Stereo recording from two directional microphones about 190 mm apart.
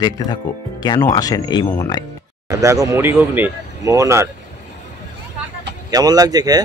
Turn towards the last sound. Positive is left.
turn(degrees=-20)  # may be behind; listen again after turning